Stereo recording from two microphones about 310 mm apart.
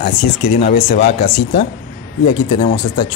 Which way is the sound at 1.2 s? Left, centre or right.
Centre.